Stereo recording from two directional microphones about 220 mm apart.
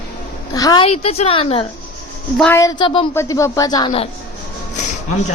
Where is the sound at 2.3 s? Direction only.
10° left (ahead or behind).